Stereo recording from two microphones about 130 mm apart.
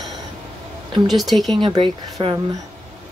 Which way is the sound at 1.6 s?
30° right (ahead or behind).